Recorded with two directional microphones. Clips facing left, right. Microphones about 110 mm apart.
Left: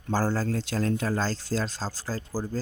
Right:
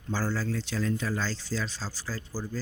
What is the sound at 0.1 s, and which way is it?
Speech, 45° left (ahead or behind).